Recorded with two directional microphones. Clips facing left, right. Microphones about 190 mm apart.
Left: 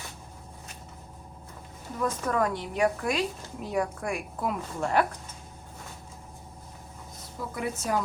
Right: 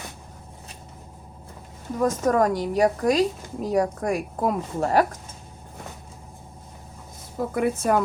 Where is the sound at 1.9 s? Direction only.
45° right (ahead or behind).